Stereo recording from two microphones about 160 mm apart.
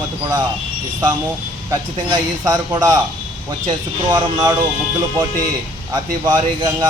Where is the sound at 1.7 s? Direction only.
25° right (ahead or behind).